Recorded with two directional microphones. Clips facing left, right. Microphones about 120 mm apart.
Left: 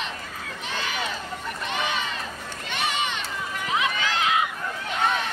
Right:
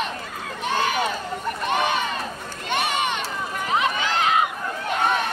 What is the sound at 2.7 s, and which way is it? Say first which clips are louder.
Crowd: right 4 dB; 50° right (ahead or behind).